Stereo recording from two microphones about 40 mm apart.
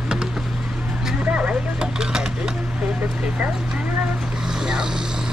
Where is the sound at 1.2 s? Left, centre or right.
Right.